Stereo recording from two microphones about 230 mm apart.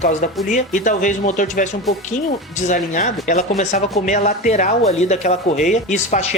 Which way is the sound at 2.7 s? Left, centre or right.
Left.